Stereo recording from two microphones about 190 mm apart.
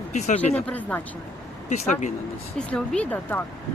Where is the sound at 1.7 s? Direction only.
40° left (ahead or behind).